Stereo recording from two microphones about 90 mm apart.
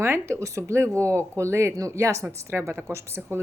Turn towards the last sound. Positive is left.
turn(degrees=-30)  # may be behind; listen again after turning